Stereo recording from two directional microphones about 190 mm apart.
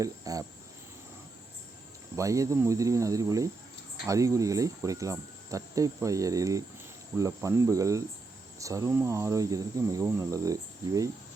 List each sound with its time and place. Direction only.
0.0 s speech: 20° right (ahead or behind)
2.1 s speech: 15° right (ahead or behind)